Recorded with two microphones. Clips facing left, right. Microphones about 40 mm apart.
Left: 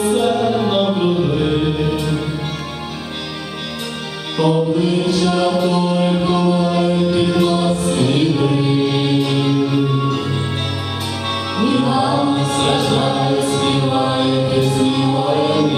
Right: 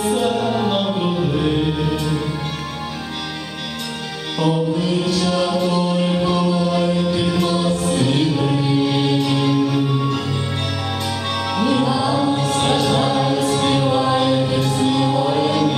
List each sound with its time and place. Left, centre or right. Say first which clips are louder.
0.0 s music: left 3 dB; centre
4.4 s music: left 4 dB; left
6.8 s mantra: left 3 dB; centre
7.4 s music: left 3 dB; centre
11.5 s music: left 2 dB; centre